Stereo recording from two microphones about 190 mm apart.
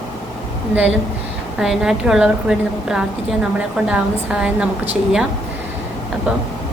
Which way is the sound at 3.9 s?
5° right (ahead or behind).